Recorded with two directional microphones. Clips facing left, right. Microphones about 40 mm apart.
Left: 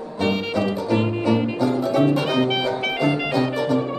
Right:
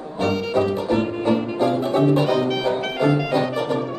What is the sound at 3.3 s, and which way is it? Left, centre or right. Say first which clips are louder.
Music: even; right.